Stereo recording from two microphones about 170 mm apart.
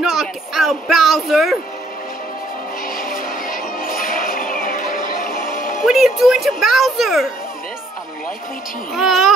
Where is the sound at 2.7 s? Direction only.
55° left (ahead or behind).